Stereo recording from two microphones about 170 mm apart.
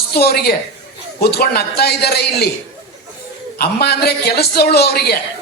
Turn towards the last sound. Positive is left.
turn(degrees=70)  # may be behind; listen again after turning